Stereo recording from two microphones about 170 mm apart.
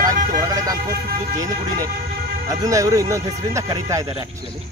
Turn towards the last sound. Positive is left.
turn(degrees=-20)  # may be behind; listen again after turning